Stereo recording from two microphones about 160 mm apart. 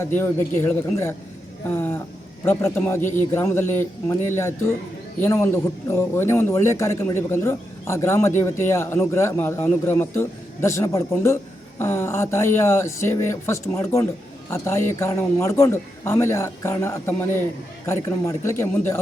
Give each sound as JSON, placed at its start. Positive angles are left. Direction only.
{"t": 0.0, "sound": "a man's voice", "side_deg": 15}